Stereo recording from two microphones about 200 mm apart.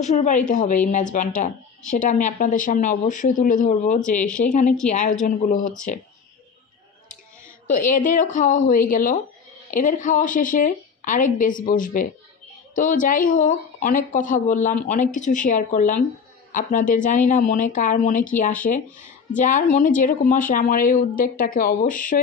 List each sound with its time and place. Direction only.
0.0 s a woman's voice: 35° left (ahead or behind)
7.6 s a woman's voice: 40° left (ahead or behind)